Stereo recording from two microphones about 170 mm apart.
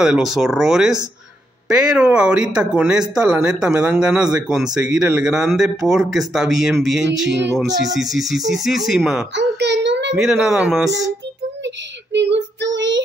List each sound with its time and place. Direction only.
0.0 s speech: 5° right (ahead or behind)
9.3 s a sound: 90° right
10.1 s speech: centre (ahead or behind)
11.6 s child singing: 90° right